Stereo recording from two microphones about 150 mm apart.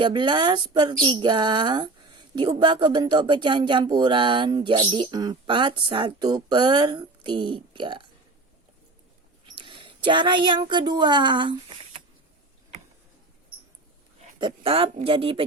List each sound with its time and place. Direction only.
0.0 s speech: 30° right (ahead or behind)
9.6 s speech: 35° right (ahead or behind)
14.3 s speech: 35° right (ahead or behind)